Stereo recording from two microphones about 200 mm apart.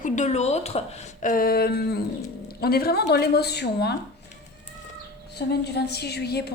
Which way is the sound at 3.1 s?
55° left (ahead or behind).